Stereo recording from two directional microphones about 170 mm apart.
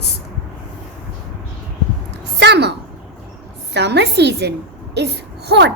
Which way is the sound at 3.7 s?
90° right.